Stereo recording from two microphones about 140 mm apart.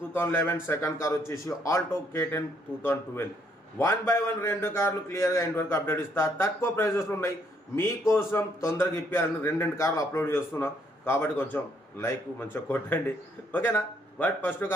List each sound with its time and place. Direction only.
0.1 s a man's voice: 15° left (ahead or behind)